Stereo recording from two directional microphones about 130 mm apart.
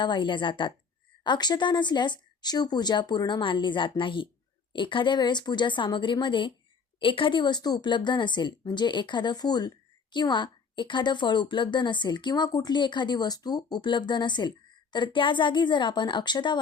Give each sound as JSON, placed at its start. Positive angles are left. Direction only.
{"t": 0.0, "sound": "a woman's voice", "side_deg": 35}